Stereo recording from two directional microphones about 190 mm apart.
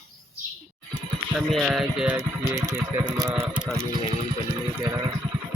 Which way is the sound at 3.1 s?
20° right (ahead or behind).